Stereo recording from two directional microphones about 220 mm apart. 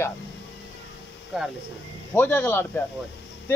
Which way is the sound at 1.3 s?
Centre (ahead or behind).